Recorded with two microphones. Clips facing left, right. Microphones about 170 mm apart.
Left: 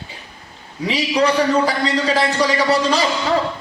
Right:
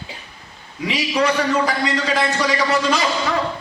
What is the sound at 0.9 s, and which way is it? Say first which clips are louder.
A man's voice: left 2 dB; 35° left (ahead or behind).